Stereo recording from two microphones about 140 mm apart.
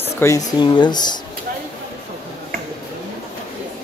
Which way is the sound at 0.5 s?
30° left (ahead or behind).